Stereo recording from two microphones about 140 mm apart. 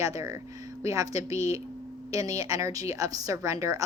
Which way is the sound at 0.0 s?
20° right (ahead or behind).